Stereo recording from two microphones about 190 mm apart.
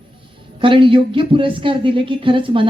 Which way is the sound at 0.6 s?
25° right (ahead or behind).